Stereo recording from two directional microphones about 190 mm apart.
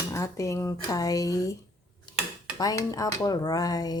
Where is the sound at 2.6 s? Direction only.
20° left (ahead or behind).